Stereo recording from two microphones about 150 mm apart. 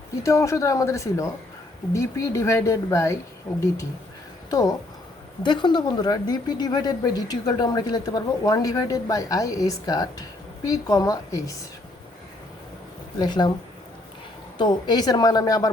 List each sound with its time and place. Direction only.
0.2 s a woman's voice: 20° left (ahead or behind)
5.4 s a woman's voice: 30° left (ahead or behind)
13.1 s a woman's voice: 30° left (ahead or behind)
14.6 s a woman's voice: 30° left (ahead or behind)